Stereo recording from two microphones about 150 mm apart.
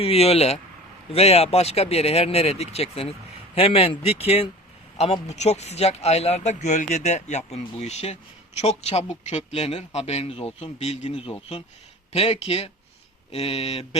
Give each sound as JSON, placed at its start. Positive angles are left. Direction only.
{"t": 0.0, "sound": "speech", "side_deg": 40}